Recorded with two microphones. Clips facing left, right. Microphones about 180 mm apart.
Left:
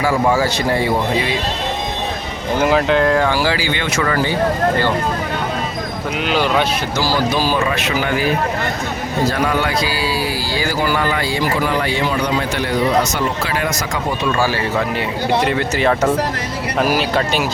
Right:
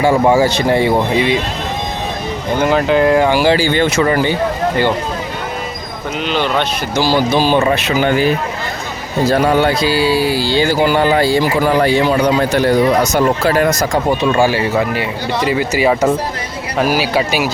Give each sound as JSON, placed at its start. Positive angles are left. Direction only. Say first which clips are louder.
{"t": 0.0, "sound": "speech", "louder": "right 5 dB", "side_deg": -20}
{"t": 2.6, "sound": "speech", "louder": "right 2 dB", "side_deg": 0}
{"t": 6.2, "sound": "speech", "louder": "even", "side_deg": 5}
{"t": 6.9, "sound": "speech", "louder": "right 6 dB", "side_deg": -20}
{"t": 9.3, "sound": "speech", "louder": "right 6 dB", "side_deg": -30}
{"t": 12.4, "sound": "speech", "louder": "right 6 dB", "side_deg": -40}
{"t": 14.3, "sound": "speech", "louder": "right 5 dB", "side_deg": -15}